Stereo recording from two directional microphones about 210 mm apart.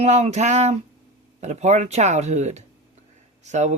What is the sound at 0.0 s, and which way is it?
Speech, 30° right (ahead or behind).